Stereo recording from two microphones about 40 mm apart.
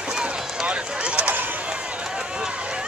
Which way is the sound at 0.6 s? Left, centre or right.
Right.